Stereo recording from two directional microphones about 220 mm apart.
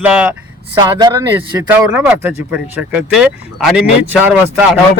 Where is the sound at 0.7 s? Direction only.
20° right (ahead or behind).